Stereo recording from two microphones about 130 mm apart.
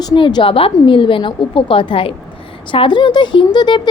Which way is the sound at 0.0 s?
30° left (ahead or behind).